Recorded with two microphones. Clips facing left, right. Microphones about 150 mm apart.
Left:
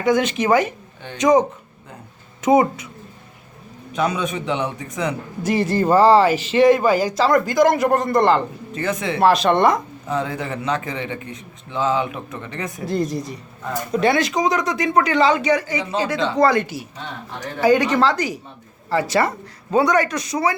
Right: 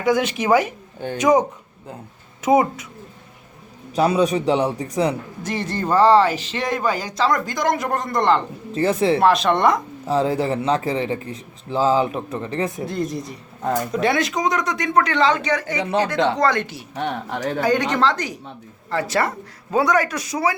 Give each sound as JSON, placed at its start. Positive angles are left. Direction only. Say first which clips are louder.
{"t": 0.0, "sound": "speech", "louder": "left 1 dB", "side_deg": -10}
{"t": 3.9, "sound": "speech", "louder": "right 4 dB", "side_deg": -35}
{"t": 5.4, "sound": "speech", "louder": "left 10 dB", "side_deg": 10}
{"t": 8.7, "sound": "speech", "louder": "right 6 dB", "side_deg": -30}
{"t": 9.2, "sound": "speech", "louder": "left 4 dB", "side_deg": 0}
{"t": 10.1, "sound": "speech", "louder": "right 5 dB", "side_deg": -30}
{"t": 12.8, "sound": "speech", "louder": "left 2 dB", "side_deg": 0}
{"t": 15.8, "sound": "speech", "louder": "right 2 dB", "side_deg": -65}
{"t": 16.4, "sound": "speech", "louder": "left 3 dB", "side_deg": 10}
{"t": 16.9, "sound": "speech", "louder": "right 7 dB", "side_deg": -70}
{"t": 17.6, "sound": "speech", "louder": "left 4 dB", "side_deg": 5}